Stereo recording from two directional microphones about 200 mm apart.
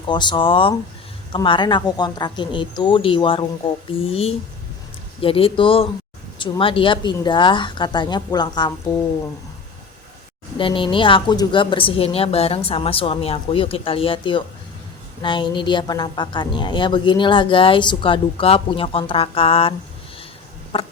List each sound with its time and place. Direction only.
0.1 s a woman's voice: 25° left (ahead or behind)
10.6 s a woman's voice: 25° left (ahead or behind)
20.7 s a sound: 25° left (ahead or behind)